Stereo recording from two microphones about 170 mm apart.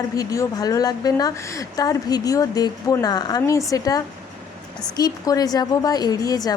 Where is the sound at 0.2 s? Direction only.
20° left (ahead or behind).